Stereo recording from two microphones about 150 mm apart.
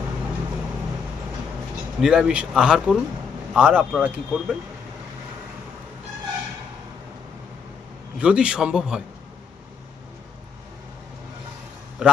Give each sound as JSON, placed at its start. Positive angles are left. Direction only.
{"t": 2.0, "sound": "speech", "side_deg": -5}
{"t": 8.2, "sound": "speech", "side_deg": -5}
{"t": 12.0, "sound": "speech", "side_deg": -5}